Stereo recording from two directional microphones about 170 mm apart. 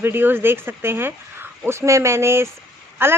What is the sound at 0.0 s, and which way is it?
Speech, 10° right (ahead or behind).